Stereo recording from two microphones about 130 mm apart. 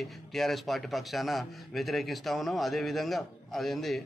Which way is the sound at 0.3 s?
Centre (ahead or behind).